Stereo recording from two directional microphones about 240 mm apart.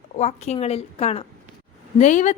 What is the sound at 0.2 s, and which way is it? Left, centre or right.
A woman's voice, left.